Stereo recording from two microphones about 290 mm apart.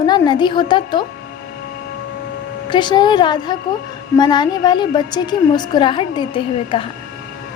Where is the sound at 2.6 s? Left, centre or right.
Centre.